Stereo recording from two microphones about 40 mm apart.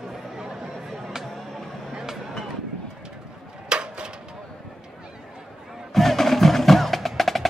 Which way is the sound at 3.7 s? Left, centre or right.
Right.